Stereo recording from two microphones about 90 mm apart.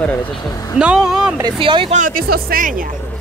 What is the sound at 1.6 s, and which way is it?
Speech, 75° right (ahead or behind).